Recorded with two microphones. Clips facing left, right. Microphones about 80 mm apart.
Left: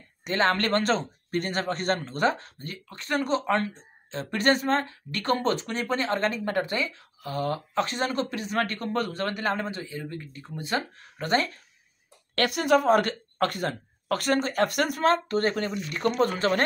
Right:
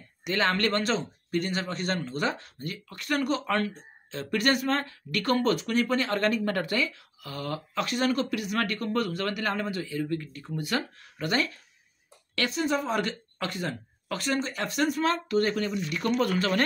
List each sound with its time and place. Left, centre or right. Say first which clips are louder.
0.2 s speech: left 2 dB; left
12.4 s a woman's voice: left 5 dB; left